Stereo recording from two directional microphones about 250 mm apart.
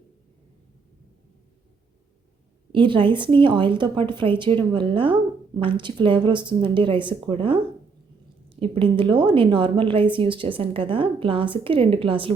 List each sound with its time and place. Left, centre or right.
2.7 s a woman's voice: centre